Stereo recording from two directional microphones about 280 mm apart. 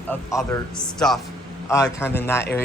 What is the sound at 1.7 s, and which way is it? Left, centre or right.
Speech, centre.